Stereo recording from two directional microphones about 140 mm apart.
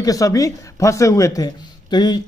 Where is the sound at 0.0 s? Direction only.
25° left (ahead or behind).